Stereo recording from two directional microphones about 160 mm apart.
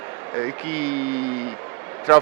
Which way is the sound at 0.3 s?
15° right (ahead or behind).